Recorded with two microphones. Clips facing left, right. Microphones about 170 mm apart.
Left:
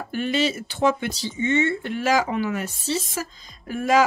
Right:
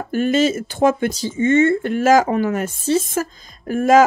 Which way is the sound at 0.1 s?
45° right (ahead or behind).